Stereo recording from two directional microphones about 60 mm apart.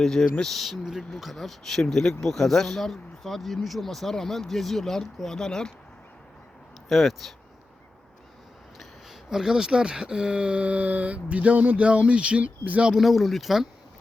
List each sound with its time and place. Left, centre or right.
0.0 s speech: centre
6.8 s speech: centre
9.3 s speech: centre
12.9 s speech: centre